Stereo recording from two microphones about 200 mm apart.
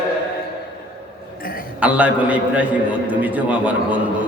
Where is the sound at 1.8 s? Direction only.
5° right (ahead or behind).